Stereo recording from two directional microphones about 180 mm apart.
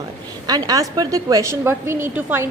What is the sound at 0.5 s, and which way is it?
A woman's voice, 20° right (ahead or behind).